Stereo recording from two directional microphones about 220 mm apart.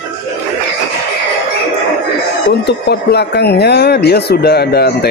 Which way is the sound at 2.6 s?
50° left (ahead or behind).